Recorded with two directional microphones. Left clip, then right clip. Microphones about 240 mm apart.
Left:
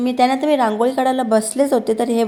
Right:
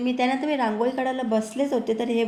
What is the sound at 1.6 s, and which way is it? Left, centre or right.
Speech, left.